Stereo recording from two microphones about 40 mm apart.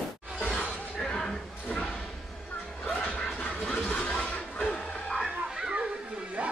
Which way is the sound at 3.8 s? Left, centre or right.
Left.